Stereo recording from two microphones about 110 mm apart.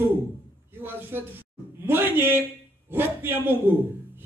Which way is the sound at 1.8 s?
20° right (ahead or behind).